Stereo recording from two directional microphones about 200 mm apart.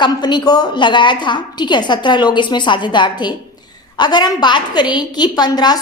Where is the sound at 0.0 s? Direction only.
20° left (ahead or behind).